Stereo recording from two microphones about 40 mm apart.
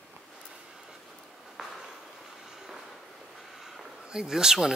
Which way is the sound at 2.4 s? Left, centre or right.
Centre.